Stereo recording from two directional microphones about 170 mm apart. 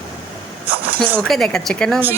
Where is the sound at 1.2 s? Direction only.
Centre (ahead or behind).